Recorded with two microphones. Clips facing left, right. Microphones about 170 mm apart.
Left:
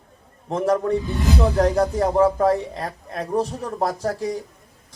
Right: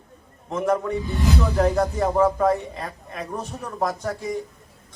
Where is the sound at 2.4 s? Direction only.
35° left (ahead or behind).